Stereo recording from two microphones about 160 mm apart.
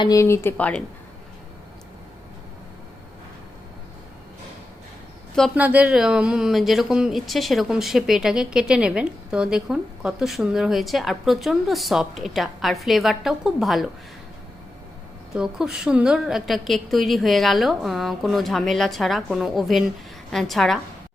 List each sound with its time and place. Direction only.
0.0 s speech: 20° left (ahead or behind)
5.5 s speech: 10° right (ahead or behind)
15.4 s speech: 5° right (ahead or behind)